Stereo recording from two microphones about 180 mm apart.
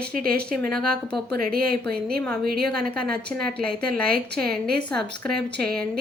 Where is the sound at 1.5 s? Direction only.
55° right (ahead or behind).